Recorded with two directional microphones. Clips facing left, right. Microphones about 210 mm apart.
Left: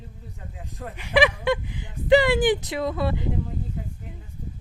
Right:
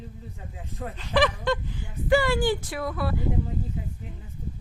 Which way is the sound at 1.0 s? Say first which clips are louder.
Left 3 dB; 10° left (ahead or behind).